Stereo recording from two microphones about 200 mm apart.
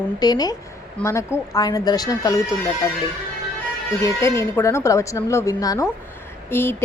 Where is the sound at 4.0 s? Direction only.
15° left (ahead or behind).